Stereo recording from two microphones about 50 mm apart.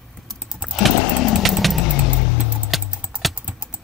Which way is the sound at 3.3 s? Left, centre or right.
Right.